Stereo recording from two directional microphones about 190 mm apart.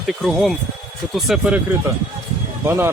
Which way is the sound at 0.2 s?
Centre (ahead or behind).